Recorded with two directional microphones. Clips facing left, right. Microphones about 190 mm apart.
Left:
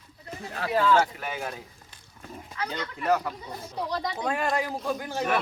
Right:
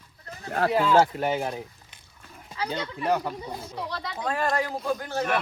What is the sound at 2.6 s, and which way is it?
Speech, 30° right (ahead or behind).